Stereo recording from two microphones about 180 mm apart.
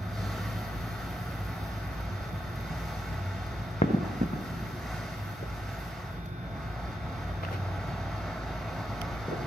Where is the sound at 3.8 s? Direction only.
40° left (ahead or behind).